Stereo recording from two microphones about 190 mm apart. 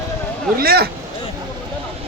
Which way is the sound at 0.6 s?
55° right (ahead or behind).